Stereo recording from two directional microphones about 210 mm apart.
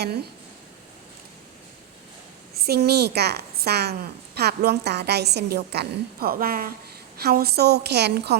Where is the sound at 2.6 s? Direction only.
50° right (ahead or behind).